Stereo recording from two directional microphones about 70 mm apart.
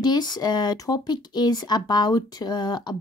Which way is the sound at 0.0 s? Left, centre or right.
Left.